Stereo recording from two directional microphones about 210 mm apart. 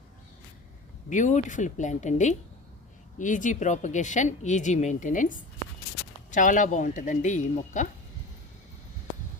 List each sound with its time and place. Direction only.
1.1 s speech: 35° left (ahead or behind)